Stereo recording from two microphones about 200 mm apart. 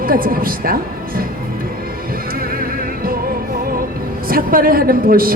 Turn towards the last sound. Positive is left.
turn(degrees=-45)  # may be behind; listen again after turning